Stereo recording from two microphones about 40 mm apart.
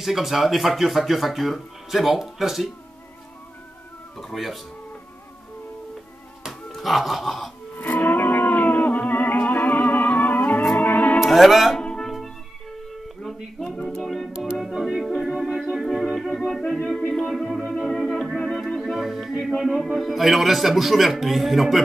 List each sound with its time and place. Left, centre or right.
0.0 s speech: centre
4.2 s speech: centre
6.7 s music: centre
8.0 s music: left
11.1 s speech: centre
13.2 s speech: centre
13.9 s music: centre
14.6 s music: centre
19.6 s speech: centre